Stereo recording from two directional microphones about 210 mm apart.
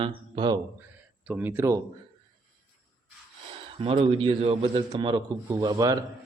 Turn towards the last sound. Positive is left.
turn(degrees=-15)  # may be behind; listen again after turning